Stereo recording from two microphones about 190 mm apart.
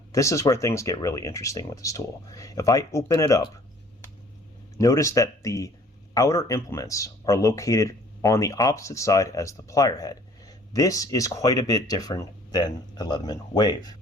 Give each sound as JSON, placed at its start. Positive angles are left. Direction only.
{"t": 0.1, "sound": "speech", "side_deg": 15}
{"t": 4.8, "sound": "speech", "side_deg": 15}